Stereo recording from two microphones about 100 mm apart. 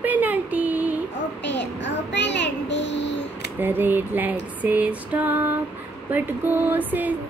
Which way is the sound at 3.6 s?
20° right (ahead or behind).